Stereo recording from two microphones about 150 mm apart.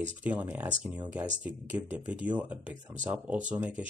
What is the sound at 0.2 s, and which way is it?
Speech, 10° right (ahead or behind).